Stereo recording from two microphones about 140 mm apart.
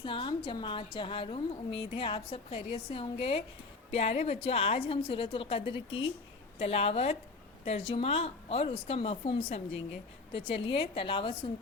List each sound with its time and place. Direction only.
0.0 s a woman's voice: 40° left (ahead or behind)